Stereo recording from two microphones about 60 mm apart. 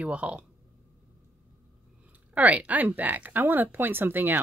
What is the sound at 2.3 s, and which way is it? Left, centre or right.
Speech, right.